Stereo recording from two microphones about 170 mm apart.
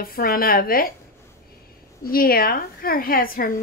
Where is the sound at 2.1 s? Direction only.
60° left (ahead or behind).